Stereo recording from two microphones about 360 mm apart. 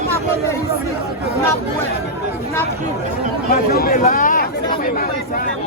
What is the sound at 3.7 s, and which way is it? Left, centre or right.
Chatter, left.